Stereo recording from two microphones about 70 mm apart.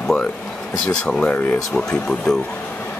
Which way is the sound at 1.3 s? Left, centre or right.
Left.